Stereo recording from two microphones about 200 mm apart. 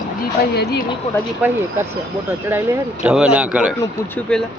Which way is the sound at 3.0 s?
5° right (ahead or behind).